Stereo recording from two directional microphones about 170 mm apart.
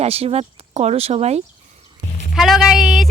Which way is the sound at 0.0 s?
35° right (ahead or behind).